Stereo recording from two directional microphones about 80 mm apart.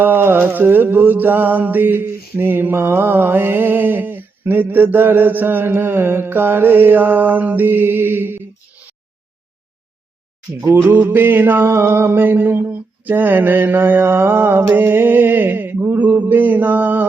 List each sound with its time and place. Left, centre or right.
0.0 s mantra: right
10.8 s mantra: right